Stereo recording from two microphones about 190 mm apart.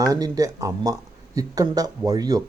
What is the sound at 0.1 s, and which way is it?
Speech, 20° right (ahead or behind).